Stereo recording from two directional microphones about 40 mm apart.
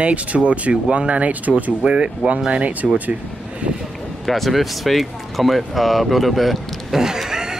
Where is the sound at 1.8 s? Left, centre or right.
Right.